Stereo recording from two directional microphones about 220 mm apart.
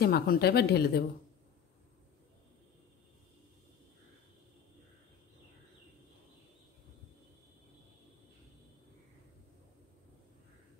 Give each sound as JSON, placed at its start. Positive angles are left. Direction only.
{"t": 0.0, "sound": "speech", "side_deg": 45}